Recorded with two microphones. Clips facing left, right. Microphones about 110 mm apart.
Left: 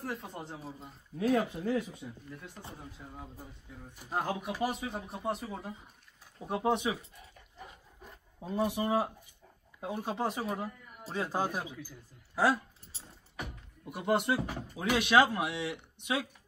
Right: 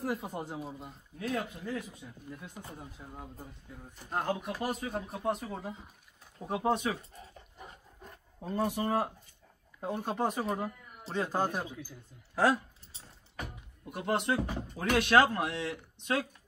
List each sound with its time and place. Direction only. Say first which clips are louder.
0.0 s speech: right 4 dB; 5° right (ahead or behind)
1.2 s speech: left 6 dB; 40° left (ahead or behind)
2.0 s speech: left 5 dB; 15° left (ahead or behind)
2.7 s speech: right 1 dB; 5° right (ahead or behind)
3.9 s speech: right 1 dB; 10° left (ahead or behind)
6.7 s speech: even; 20° left (ahead or behind)
8.0 s dog: even; centre (ahead or behind)
8.5 s speech: left 1 dB; 10° left (ahead or behind)
13.0 s speech: even; 10° left (ahead or behind)